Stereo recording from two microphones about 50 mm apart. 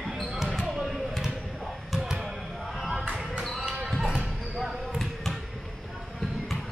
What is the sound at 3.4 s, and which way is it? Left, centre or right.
Basketball bounce, centre.